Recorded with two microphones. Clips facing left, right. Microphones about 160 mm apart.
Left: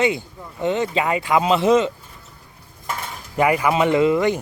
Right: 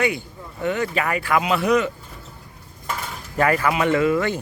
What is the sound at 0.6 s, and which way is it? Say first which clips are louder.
Speech: left 2 dB; 20° left (ahead or behind).